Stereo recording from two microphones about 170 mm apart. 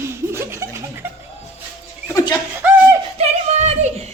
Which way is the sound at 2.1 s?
25° left (ahead or behind).